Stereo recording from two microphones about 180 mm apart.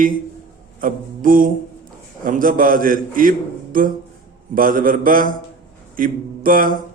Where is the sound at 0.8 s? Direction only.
50° right (ahead or behind).